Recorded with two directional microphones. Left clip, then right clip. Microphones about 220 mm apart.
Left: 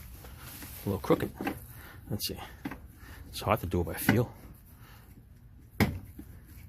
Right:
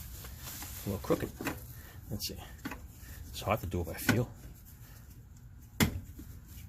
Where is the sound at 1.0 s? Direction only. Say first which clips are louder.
Left 4 dB; 35° left (ahead or behind).